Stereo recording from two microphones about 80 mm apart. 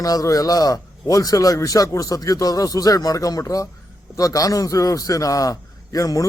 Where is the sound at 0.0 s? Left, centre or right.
Left.